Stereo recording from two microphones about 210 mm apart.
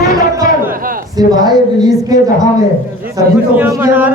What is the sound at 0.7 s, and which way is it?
Speech, 40° right (ahead or behind).